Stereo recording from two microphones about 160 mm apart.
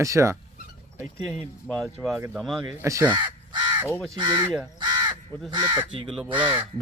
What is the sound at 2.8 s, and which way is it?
Speech, 15° right (ahead or behind).